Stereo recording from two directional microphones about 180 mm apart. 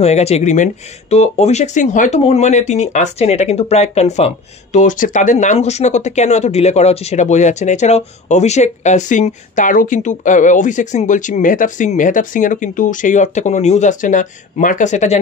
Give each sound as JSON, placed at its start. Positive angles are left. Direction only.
{"t": 0.0, "sound": "speech", "side_deg": 35}